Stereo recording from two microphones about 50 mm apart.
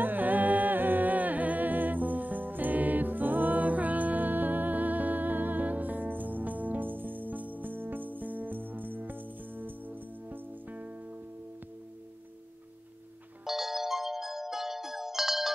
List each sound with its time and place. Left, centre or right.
0.0 s music: right
13.5 s music: centre